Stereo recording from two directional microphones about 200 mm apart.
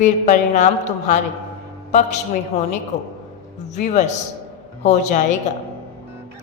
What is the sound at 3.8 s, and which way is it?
A woman's voice, 35° left (ahead or behind).